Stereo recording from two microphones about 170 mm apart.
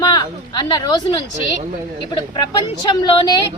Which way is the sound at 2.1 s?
25° left (ahead or behind).